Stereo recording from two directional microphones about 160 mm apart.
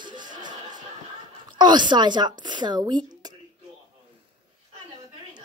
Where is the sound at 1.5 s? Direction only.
30° right (ahead or behind).